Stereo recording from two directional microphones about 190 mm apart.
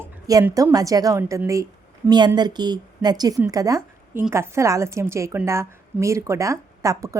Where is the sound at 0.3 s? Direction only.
20° right (ahead or behind).